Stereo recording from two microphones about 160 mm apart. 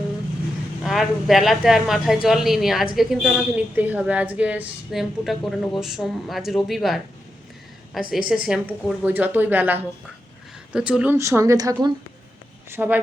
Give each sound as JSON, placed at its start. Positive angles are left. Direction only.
{"t": 0.8, "sound": "a woman's voice", "side_deg": 0}
{"t": 12.7, "sound": "a woman's voice", "side_deg": -10}